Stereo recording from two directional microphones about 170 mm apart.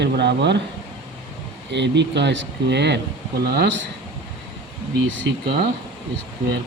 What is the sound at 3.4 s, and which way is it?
Speech, 70° right (ahead or behind).